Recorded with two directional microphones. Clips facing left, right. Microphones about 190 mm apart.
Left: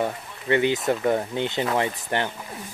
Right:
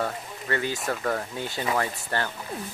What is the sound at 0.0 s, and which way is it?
Speech, 20° left (ahead or behind).